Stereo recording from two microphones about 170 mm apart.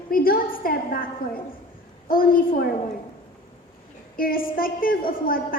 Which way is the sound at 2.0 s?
55° left (ahead or behind).